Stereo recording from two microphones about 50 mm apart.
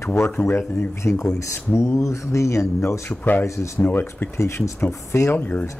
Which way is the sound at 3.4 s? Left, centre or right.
Left.